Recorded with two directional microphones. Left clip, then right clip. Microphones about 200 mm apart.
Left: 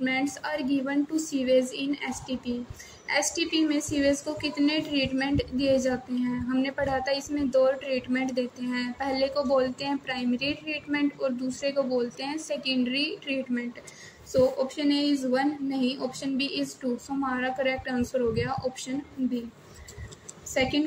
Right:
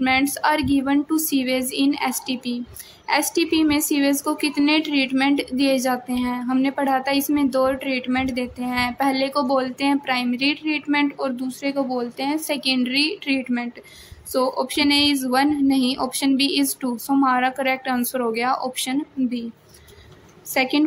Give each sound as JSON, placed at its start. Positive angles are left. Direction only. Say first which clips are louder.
{"t": 0.0, "sound": "a woman's voice", "louder": "right 10 dB", "side_deg": -40}
{"t": 20.5, "sound": "a woman's voice", "louder": "right 5 dB", "side_deg": -40}